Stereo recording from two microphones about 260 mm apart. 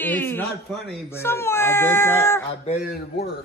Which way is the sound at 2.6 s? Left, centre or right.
Left.